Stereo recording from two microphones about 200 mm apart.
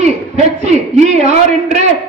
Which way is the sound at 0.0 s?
35° right (ahead or behind).